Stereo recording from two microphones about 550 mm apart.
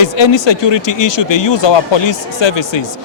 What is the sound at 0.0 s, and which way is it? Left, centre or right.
Speech, left.